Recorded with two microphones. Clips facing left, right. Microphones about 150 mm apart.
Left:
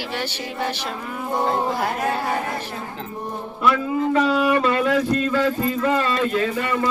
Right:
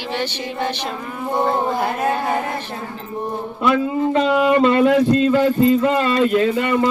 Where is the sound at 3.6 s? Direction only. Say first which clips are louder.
Right 2 dB; 25° right (ahead or behind).